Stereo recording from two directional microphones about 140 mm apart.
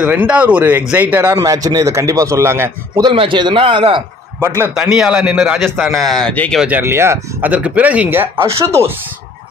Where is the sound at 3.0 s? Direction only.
35° right (ahead or behind).